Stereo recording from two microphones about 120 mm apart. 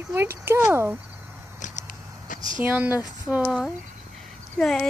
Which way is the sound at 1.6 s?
90° left.